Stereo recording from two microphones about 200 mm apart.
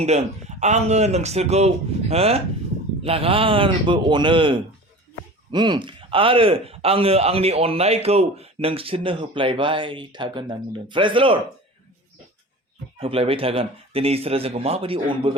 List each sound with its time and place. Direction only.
0.0 s speech: 35° right (ahead or behind)
13.0 s speech: 30° right (ahead or behind)